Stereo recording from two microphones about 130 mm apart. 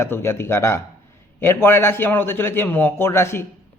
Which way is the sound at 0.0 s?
20° left (ahead or behind).